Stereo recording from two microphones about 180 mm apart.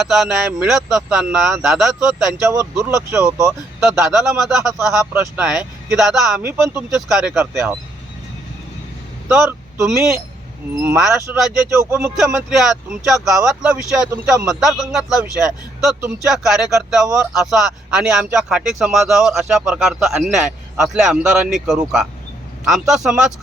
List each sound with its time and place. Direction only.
0.0 s speech: centre (ahead or behind)
3.2 s speech: 20° right (ahead or behind)
3.8 s speech: 5° right (ahead or behind)
6.4 s speech: 15° right (ahead or behind)
9.3 s speech: 5° right (ahead or behind)
12.1 s speech: centre (ahead or behind)